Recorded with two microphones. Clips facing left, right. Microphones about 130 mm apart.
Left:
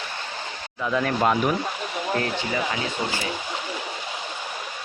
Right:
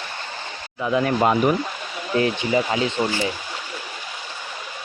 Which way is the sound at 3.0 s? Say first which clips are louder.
Right 5 dB; 30° right (ahead or behind).